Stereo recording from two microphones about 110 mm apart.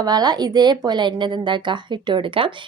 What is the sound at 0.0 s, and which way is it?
A woman's voice, 35° right (ahead or behind).